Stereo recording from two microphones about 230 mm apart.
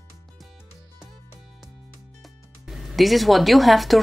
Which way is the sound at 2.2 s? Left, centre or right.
Centre.